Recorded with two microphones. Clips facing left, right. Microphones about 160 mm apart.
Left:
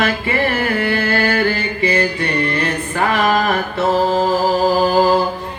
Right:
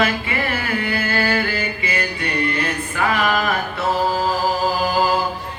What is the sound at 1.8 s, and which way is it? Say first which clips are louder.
Mantra: left 12 dB; 40° left (ahead or behind).